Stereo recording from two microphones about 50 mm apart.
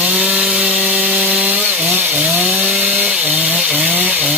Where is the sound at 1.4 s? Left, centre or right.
Right.